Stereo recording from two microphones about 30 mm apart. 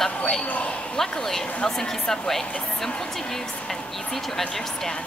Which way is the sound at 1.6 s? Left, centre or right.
Centre.